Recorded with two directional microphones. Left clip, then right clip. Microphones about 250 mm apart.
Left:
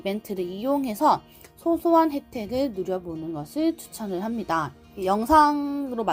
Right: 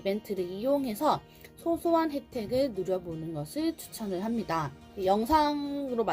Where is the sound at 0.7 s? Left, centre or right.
Left.